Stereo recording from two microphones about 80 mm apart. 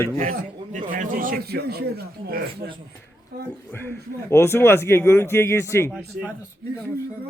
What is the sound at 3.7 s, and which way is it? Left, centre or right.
A man's voice, left.